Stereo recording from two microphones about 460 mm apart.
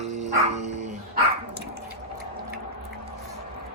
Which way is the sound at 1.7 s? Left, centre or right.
Right.